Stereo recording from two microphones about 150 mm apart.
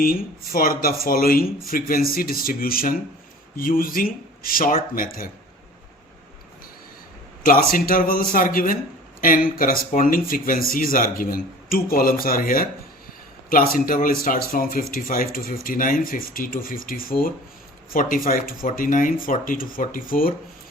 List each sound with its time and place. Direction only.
0.0 s speech: 75° left (ahead or behind)
7.4 s a man's voice: 75° left (ahead or behind)
13.7 s speech: 70° left (ahead or behind)